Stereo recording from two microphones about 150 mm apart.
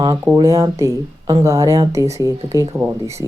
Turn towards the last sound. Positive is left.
turn(degrees=-20)  # may be behind; listen again after turning